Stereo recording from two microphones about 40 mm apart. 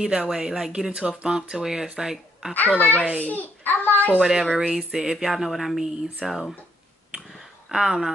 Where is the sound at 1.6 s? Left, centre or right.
Centre.